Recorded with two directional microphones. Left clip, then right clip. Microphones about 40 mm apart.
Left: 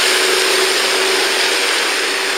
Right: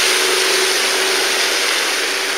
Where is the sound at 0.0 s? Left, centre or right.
Right.